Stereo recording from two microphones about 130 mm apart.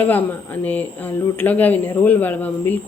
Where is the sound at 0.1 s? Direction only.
15° left (ahead or behind).